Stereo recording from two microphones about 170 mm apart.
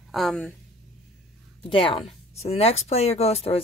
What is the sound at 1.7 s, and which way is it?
A woman's voice, 30° left (ahead or behind).